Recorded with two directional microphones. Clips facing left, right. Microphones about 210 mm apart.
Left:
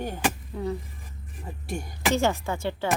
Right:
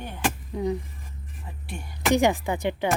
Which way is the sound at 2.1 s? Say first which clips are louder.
Right 4 dB; 15° right (ahead or behind).